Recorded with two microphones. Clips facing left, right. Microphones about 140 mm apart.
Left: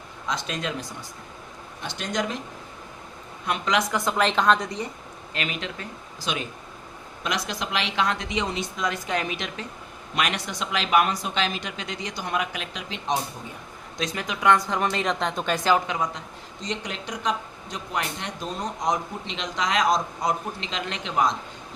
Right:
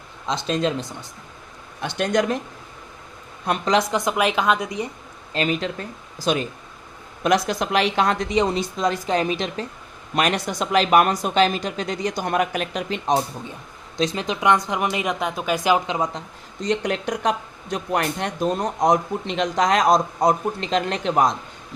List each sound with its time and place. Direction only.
0.3 s speech: 30° right (ahead or behind)
1.8 s speech: 60° right (ahead or behind)
3.4 s speech: 35° right (ahead or behind)
3.9 s speech: 15° right (ahead or behind)
5.3 s speech: 35° right (ahead or behind)
13.9 s speech: 30° right (ahead or behind)
16.6 s speech: 55° right (ahead or behind)